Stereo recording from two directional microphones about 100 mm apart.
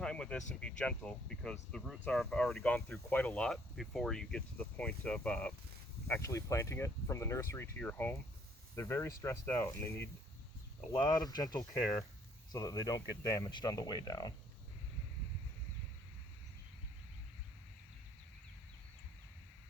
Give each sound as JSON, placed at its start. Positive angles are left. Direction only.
{"t": 0.0, "sound": "speech", "side_deg": 10}
{"t": 6.1, "sound": "speech", "side_deg": 30}
{"t": 10.9, "sound": "speech", "side_deg": 45}